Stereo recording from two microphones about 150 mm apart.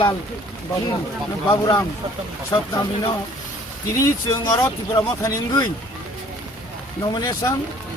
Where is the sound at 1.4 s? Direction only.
30° left (ahead or behind).